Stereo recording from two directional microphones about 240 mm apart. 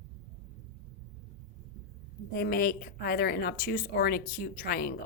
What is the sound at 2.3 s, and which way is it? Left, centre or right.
Speech, left.